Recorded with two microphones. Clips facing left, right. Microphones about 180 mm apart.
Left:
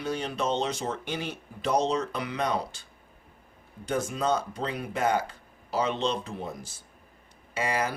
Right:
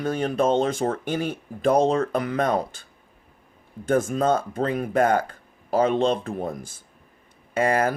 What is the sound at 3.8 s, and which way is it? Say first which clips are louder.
Speech: right 7 dB; 50° right (ahead or behind).